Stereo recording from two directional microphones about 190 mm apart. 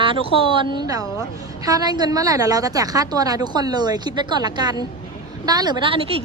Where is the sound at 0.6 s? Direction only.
20° right (ahead or behind).